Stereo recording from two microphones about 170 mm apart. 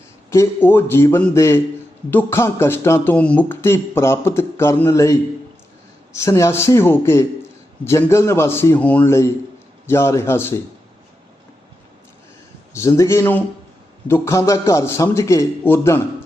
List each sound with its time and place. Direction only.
0.3 s speech: 15° left (ahead or behind)
6.1 s speech: 15° left (ahead or behind)
12.7 s speech: 15° left (ahead or behind)